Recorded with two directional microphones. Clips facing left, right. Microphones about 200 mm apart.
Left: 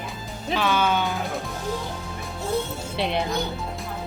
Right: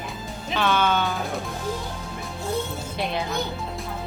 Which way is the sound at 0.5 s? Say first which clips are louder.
Even; 5° left (ahead or behind).